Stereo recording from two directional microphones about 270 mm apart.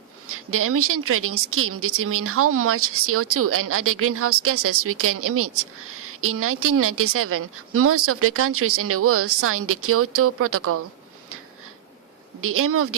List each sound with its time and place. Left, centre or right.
0.3 s a woman's voice: right
12.4 s a woman's voice: right